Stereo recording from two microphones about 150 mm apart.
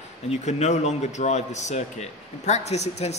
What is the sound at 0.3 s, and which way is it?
A man's voice, 50° left (ahead or behind).